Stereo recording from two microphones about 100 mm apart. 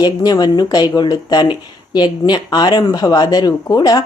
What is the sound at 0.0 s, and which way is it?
Speech, 45° left (ahead or behind).